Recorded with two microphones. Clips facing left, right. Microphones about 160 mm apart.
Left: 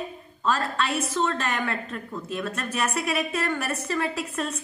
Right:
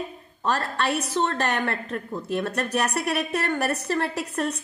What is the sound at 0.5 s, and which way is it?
A woman's voice, 60° right (ahead or behind).